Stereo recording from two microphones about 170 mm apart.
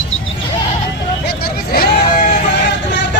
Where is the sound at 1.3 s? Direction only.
65° left (ahead or behind).